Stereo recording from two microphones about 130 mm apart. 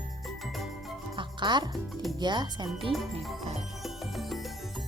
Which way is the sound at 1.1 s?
35° right (ahead or behind).